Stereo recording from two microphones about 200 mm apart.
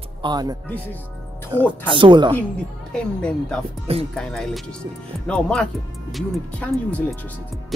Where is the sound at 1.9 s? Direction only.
25° right (ahead or behind).